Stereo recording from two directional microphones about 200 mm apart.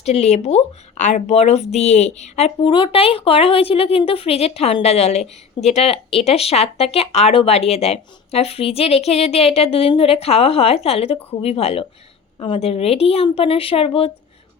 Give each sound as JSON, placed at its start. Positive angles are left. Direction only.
{"t": 0.0, "sound": "a woman's voice", "side_deg": 35}